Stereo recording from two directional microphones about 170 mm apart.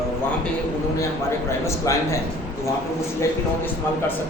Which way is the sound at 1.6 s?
20° left (ahead or behind).